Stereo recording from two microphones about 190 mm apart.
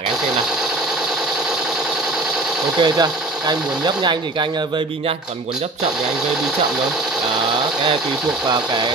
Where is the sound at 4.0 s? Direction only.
25° right (ahead or behind).